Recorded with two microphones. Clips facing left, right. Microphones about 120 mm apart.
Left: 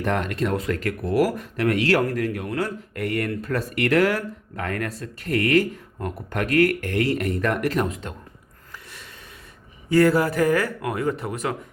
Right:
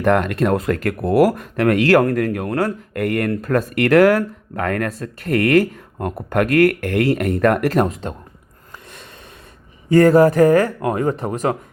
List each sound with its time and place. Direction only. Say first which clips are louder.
0.0 s speech: right 7 dB; 50° right (ahead or behind)
9.9 s speech: right 7 dB; 45° right (ahead or behind)